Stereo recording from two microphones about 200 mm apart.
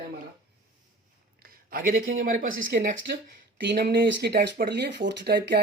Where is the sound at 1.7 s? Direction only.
45° right (ahead or behind).